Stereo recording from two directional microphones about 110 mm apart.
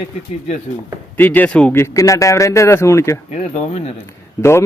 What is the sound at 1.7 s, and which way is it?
A man's voice, 25° left (ahead or behind).